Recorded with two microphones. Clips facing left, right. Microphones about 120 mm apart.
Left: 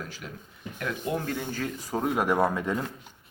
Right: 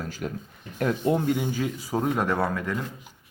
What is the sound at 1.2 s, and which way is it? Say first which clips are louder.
Speech: right 6 dB; 15° right (ahead or behind).